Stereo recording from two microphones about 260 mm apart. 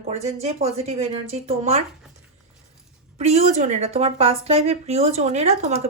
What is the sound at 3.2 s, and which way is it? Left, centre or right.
Speech, right.